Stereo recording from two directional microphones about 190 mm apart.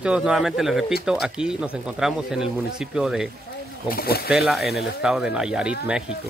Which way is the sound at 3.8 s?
55° left (ahead or behind).